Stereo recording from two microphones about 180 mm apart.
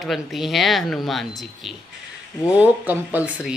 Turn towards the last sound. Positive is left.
turn(degrees=-10)  # may be behind; listen again after turning